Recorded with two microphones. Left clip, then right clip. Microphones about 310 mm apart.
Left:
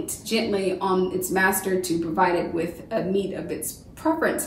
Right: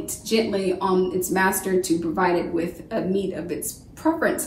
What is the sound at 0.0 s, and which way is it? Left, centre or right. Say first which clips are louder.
A woman's voice: right 3 dB; centre.